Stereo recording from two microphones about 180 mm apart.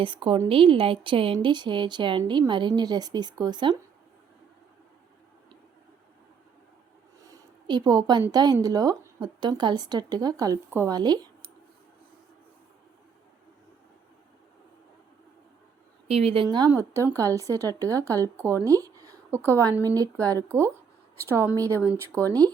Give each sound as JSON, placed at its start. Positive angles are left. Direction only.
{"t": 0.0, "sound": "a woman's voice", "side_deg": -30}
{"t": 7.3, "sound": "a woman's voice", "side_deg": -20}
{"t": 16.0, "sound": "a woman's voice", "side_deg": -35}